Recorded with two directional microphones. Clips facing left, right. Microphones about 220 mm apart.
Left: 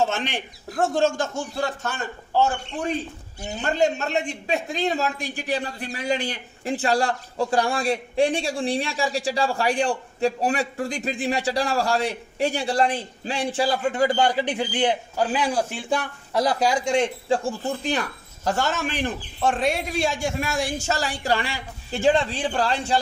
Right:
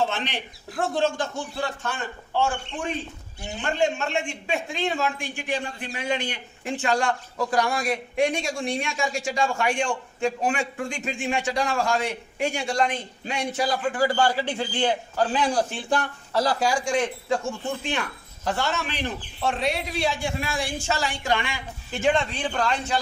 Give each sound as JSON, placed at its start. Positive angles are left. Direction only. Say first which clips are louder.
{"t": 0.0, "sound": "a man's voice", "louder": "left 2 dB", "side_deg": 45}